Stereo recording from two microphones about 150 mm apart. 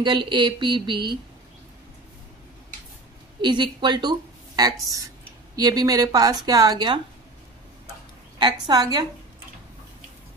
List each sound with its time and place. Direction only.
0.0 s speech: 30° right (ahead or behind)
3.3 s a woman's voice: 30° right (ahead or behind)
8.4 s a woman's voice: 30° right (ahead or behind)